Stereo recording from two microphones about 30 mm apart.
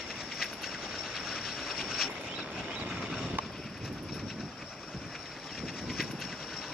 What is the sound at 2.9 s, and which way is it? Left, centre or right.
Vehicle, right.